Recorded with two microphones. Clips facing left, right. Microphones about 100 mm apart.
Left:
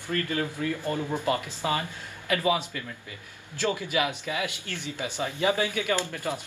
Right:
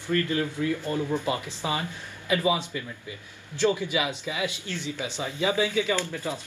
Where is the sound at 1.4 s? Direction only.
20° right (ahead or behind).